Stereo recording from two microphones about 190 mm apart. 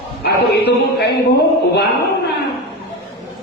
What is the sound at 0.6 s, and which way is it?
Speech, 60° left (ahead or behind).